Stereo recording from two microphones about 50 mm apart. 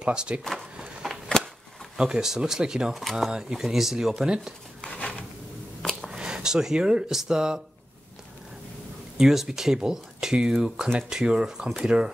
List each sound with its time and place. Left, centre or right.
0.0 s speech: centre
0.4 s speech: centre
1.0 s a sound: centre
2.0 s speech: centre
2.9 s speech: centre
3.3 s speech: centre
4.9 s a sound: left
5.8 s a sound: centre
6.1 s speech: centre
9.2 s speech: centre